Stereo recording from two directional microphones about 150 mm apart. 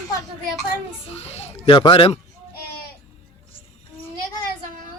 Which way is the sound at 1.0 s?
45° left (ahead or behind).